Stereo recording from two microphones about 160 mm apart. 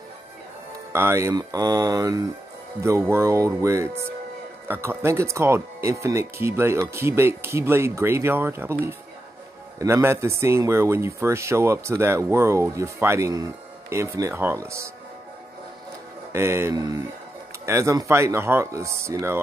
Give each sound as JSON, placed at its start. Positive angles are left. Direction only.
{"t": 0.9, "sound": "speech", "side_deg": -15}
{"t": 9.8, "sound": "speech", "side_deg": -20}
{"t": 16.3, "sound": "speech", "side_deg": -15}